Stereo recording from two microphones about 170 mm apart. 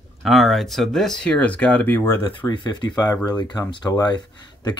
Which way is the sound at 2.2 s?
30° left (ahead or behind).